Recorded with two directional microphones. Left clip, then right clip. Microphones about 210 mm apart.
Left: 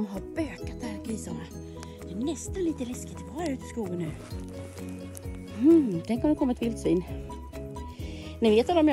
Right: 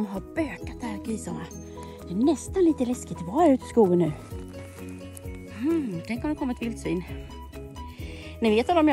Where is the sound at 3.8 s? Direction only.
30° left (ahead or behind).